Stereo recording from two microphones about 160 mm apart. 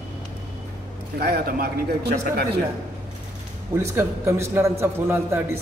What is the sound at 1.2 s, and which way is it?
Speech, 75° right (ahead or behind).